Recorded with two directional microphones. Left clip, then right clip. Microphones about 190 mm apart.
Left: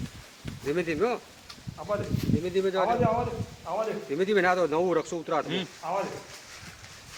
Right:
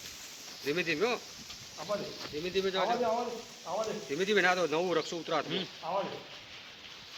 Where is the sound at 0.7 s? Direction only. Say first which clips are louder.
Left 3 dB; 40° left (ahead or behind).